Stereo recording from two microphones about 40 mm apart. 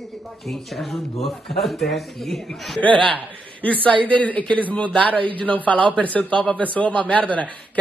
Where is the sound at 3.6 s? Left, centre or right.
Left.